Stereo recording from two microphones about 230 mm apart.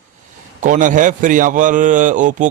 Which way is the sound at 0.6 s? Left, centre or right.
Right.